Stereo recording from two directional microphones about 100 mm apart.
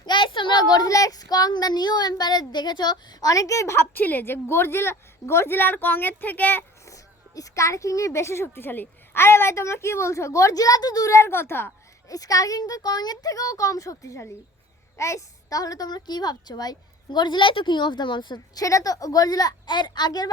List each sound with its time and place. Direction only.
0.0 s a child's voice: 50° left (ahead or behind); by 6.7 s 20° left (ahead or behind)
6.8 s speech: 35° left (ahead or behind)
12.0 s a child's voice: 35° left (ahead or behind)
18.6 s a child's voice: 35° left (ahead or behind)